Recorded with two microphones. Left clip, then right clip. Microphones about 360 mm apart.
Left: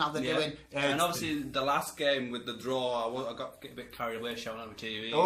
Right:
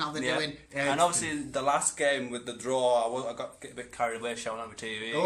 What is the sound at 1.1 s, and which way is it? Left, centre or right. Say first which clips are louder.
A man's voice: right 2 dB; centre.